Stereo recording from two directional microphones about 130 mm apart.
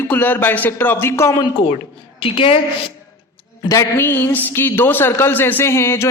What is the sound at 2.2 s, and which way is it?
Speech, 45° left (ahead or behind).